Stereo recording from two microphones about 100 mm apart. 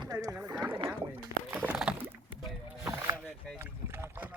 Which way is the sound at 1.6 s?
15° right (ahead or behind).